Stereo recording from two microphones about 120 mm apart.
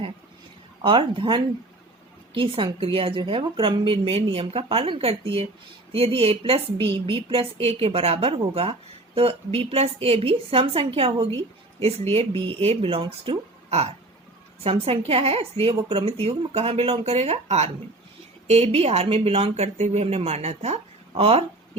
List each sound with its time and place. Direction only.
0.8 s a woman's voice: 45° right (ahead or behind)
13.7 s hiccup: 60° right (ahead or behind)
14.6 s a woman's voice: 50° right (ahead or behind)
21.1 s speech: 55° right (ahead or behind)